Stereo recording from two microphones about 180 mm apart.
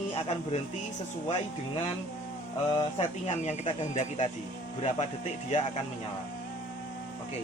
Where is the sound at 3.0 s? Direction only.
40° left (ahead or behind).